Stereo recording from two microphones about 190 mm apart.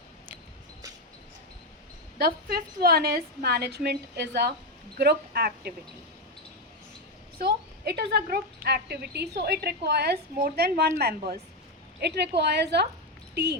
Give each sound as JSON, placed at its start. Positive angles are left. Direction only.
{"t": 2.1, "sound": "a woman's voice", "side_deg": -55}
{"t": 7.3, "sound": "a woman's voice", "side_deg": -55}